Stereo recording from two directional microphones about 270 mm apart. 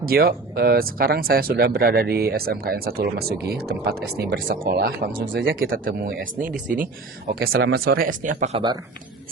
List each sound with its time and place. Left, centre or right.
0.0 s speech: right